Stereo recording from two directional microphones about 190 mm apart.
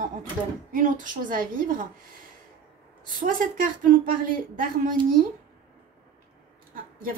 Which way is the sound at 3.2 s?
45° right (ahead or behind).